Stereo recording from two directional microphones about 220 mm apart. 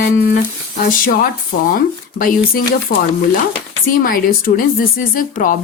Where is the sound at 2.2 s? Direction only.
35° left (ahead or behind).